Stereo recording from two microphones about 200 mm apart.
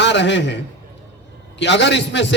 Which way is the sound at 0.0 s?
60° left (ahead or behind).